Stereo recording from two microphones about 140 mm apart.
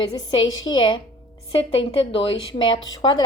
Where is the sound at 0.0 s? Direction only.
35° left (ahead or behind).